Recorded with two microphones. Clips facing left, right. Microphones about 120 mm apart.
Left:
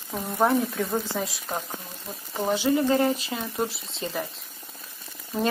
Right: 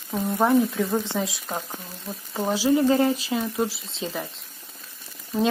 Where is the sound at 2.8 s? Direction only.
15° right (ahead or behind).